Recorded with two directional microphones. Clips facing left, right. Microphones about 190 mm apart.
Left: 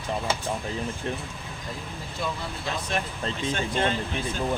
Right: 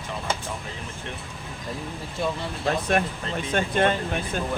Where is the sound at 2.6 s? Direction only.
55° right (ahead or behind).